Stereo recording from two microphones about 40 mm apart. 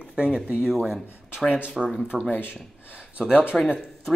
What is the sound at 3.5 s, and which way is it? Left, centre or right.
Speech, centre.